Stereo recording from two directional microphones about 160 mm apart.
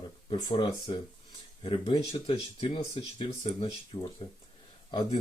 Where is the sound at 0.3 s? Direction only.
25° left (ahead or behind).